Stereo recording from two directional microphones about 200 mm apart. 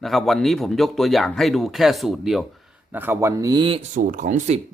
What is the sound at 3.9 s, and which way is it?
Speech, 40° right (ahead or behind).